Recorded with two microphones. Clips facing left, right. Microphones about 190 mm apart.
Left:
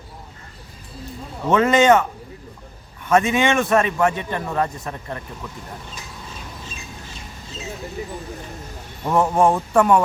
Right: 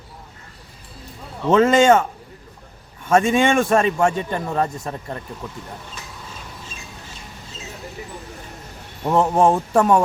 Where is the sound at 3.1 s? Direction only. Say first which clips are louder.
Right 1 dB; 30° right (ahead or behind).